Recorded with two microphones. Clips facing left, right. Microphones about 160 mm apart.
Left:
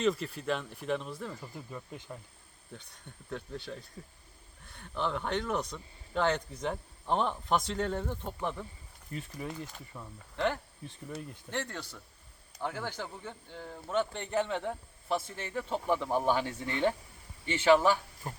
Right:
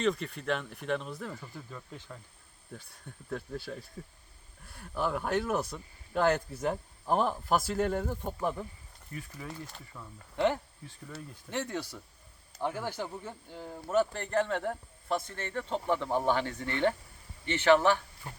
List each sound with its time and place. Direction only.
0.0 s speech: centre (ahead or behind)
1.4 s speech: 15° left (ahead or behind)
3.2 s speech: 5° right (ahead or behind)
9.1 s speech: 25° left (ahead or behind)
9.5 s speech: centre (ahead or behind)
10.3 s speech: 15° right (ahead or behind); by 18.0 s 10° left (ahead or behind)
18.3 s speech: 40° left (ahead or behind)